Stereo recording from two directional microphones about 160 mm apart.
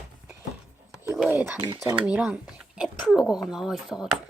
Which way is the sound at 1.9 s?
10° right (ahead or behind).